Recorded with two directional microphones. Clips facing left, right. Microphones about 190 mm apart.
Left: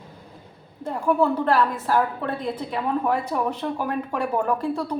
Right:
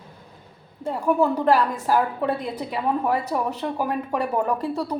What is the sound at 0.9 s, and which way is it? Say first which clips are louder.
A woman's voice: even; 5° right (ahead or behind).